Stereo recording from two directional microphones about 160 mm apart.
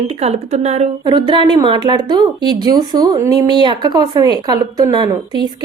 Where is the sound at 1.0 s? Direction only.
30° right (ahead or behind).